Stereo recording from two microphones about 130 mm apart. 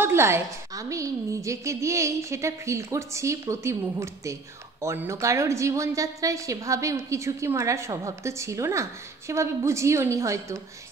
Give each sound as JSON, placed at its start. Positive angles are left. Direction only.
{"t": 0.0, "sound": "a woman's voice", "side_deg": -20}